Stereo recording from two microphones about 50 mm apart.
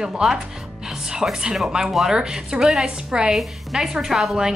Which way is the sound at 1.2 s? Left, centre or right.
Centre.